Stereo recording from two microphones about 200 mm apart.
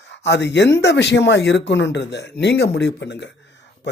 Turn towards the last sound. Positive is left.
turn(degrees=60)  # may be behind; listen again after turning